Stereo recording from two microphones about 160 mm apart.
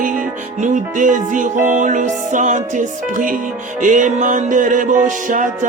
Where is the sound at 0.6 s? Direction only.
50° right (ahead or behind).